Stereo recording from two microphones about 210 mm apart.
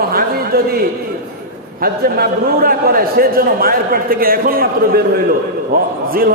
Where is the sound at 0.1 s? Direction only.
45° right (ahead or behind).